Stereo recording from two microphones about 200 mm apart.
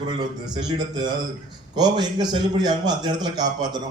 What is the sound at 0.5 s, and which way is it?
A man's voice, 20° right (ahead or behind).